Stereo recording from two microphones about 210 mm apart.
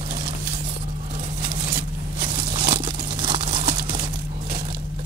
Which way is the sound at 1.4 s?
20° right (ahead or behind).